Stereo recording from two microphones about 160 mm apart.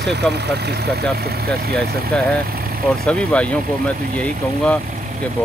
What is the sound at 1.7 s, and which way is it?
Speech, 5° left (ahead or behind).